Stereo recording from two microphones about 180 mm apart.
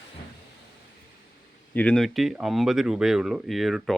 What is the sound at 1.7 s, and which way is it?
Speech, 5° left (ahead or behind).